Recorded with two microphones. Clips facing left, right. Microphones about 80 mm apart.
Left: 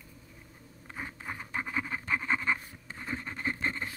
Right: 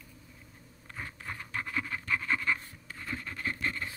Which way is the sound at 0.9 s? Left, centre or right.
Centre.